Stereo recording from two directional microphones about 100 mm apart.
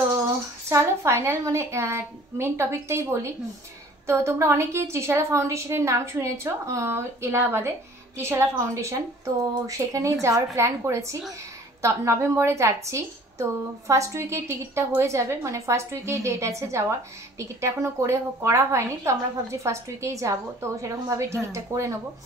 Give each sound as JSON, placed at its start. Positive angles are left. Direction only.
{"t": 0.7, "sound": "a woman's voice", "side_deg": -25}